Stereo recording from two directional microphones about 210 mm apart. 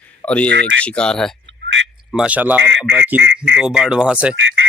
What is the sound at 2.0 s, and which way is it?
Speech, 5° right (ahead or behind).